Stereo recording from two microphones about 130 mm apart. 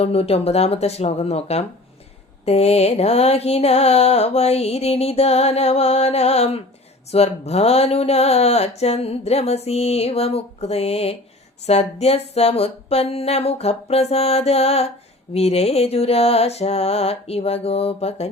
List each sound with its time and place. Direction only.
0.0 s mantra: 50° left (ahead or behind)